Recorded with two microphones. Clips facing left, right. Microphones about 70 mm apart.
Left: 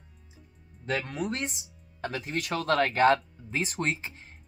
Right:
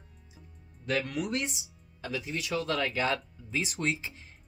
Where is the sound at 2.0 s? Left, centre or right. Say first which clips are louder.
Left 3 dB; left.